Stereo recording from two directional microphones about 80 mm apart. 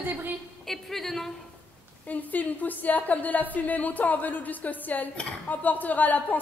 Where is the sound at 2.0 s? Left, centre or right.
Left.